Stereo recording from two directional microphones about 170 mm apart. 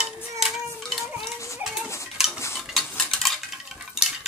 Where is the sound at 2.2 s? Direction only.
Centre (ahead or behind).